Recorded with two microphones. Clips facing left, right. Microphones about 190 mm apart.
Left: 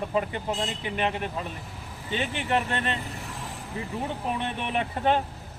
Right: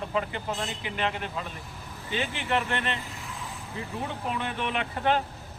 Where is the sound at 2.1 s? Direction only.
30° left (ahead or behind).